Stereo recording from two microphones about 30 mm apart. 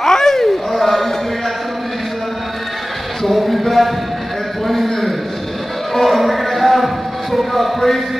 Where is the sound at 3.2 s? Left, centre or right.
Centre.